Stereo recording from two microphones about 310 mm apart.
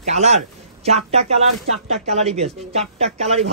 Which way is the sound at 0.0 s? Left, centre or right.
Right.